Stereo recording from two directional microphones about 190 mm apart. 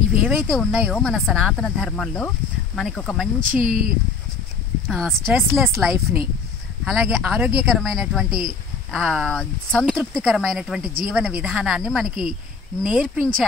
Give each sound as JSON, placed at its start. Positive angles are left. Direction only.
{"t": 0.2, "sound": "speech", "side_deg": 0}
{"t": 3.4, "sound": "speech", "side_deg": -45}
{"t": 4.8, "sound": "speech", "side_deg": 5}